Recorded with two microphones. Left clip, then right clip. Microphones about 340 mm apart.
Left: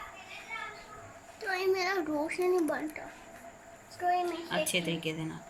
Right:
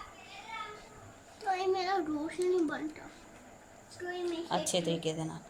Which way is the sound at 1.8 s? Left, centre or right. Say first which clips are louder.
Left 2 dB; centre.